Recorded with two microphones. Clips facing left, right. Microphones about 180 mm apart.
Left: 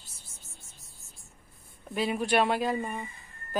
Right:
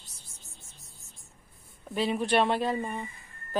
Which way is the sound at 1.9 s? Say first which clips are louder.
Right 1 dB; 5° left (ahead or behind).